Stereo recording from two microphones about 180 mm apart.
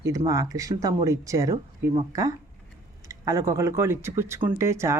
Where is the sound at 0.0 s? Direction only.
15° right (ahead or behind).